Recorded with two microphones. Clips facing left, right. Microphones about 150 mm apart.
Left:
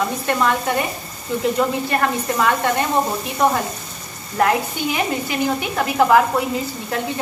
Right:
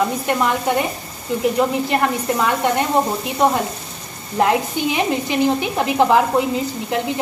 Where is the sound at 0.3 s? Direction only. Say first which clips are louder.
Left 2 dB; 15° right (ahead or behind).